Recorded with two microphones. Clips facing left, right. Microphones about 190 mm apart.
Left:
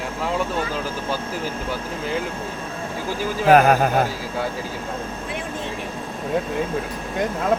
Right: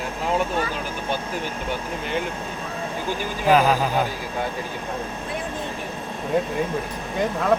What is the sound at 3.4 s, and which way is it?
Speech, 55° left (ahead or behind).